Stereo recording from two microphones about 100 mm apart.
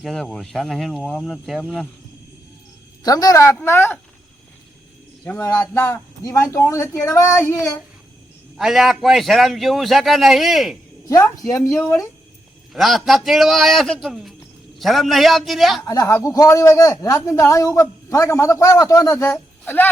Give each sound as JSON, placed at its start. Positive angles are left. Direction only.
{"t": 0.0, "sound": "a man's voice", "side_deg": 5}
{"t": 3.0, "sound": "a man's voice", "side_deg": 40}
{"t": 5.4, "sound": "a man's voice", "side_deg": 35}
{"t": 5.7, "sound": "speech", "side_deg": 25}
{"t": 8.5, "sound": "a man's voice", "side_deg": -5}
{"t": 11.1, "sound": "a man's voice", "side_deg": 35}
{"t": 12.7, "sound": "a man's voice", "side_deg": 0}
{"t": 15.9, "sound": "a man's voice", "side_deg": 30}
{"t": 19.2, "sound": "speech", "side_deg": 20}